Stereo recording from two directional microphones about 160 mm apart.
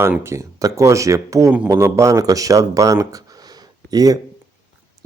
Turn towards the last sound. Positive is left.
turn(degrees=-25)  # may be behind; listen again after turning